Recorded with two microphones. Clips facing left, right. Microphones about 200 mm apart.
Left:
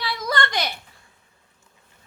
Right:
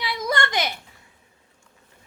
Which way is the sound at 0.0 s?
15° right (ahead or behind).